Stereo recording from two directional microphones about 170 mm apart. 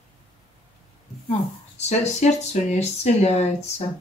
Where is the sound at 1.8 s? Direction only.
40° left (ahead or behind).